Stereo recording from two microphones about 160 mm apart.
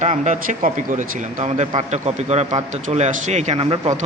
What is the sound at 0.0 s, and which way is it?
Speech, 50° right (ahead or behind).